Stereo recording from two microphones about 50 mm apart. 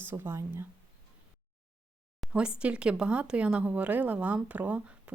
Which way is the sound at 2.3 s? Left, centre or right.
Right.